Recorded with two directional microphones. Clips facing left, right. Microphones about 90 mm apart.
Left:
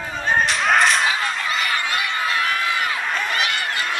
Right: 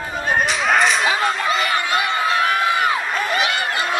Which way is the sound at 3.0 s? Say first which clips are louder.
Right 2 dB; 5° right (ahead or behind).